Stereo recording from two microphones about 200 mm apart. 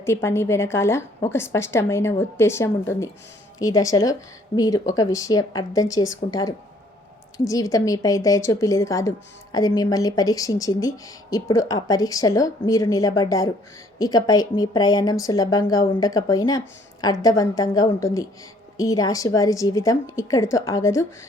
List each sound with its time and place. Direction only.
0.0 s a woman's voice: 15° left (ahead or behind)